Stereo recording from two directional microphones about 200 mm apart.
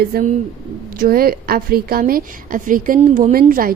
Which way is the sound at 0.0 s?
45° right (ahead or behind).